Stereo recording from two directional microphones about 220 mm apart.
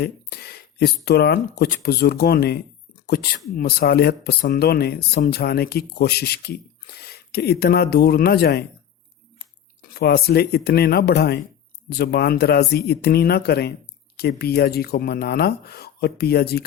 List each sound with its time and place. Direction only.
0.0 s speech: 45° left (ahead or behind)
9.9 s speech: 45° left (ahead or behind)